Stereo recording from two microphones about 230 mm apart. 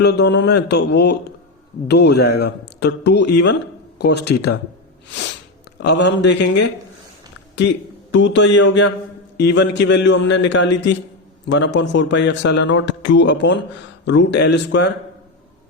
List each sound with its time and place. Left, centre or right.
0.0 s speech: left
5.8 s speech: left
8.1 s speech: left